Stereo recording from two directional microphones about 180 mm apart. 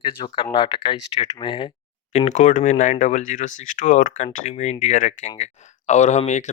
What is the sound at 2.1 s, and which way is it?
Speech, 40° left (ahead or behind).